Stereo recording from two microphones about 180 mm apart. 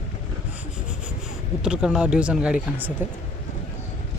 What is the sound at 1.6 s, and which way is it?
Speech, 5° right (ahead or behind).